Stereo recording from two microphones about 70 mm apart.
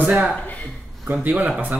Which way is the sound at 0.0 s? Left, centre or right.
Right.